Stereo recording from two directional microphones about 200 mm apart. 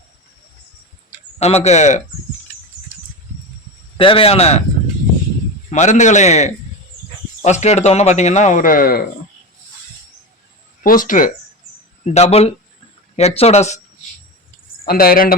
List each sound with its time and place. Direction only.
1.4 s speech: 30° left (ahead or behind)
3.9 s speech: 25° left (ahead or behind)
5.7 s speech: 35° left (ahead or behind)
10.8 s speech: 40° left (ahead or behind)
14.8 s speech: 45° left (ahead or behind)